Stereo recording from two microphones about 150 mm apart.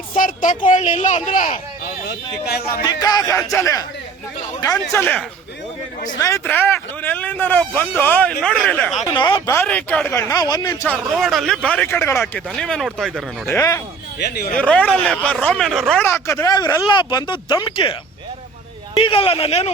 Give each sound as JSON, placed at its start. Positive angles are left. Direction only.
{"t": 0.1, "sound": "speech", "side_deg": 65}
{"t": 2.0, "sound": "speech", "side_deg": 90}
{"t": 2.8, "sound": "speech", "side_deg": 25}
{"t": 6.1, "sound": "speech", "side_deg": 20}
{"t": 9.0, "sound": "speech", "side_deg": 30}
{"t": 9.5, "sound": "speech", "side_deg": 10}
{"t": 11.1, "sound": "speech", "side_deg": 0}
{"t": 13.5, "sound": "speech", "side_deg": 20}
{"t": 14.2, "sound": "speech", "side_deg": 90}
{"t": 14.6, "sound": "speech", "side_deg": 10}
{"t": 16.0, "sound": "speech", "side_deg": 15}
{"t": 18.9, "sound": "speech", "side_deg": 35}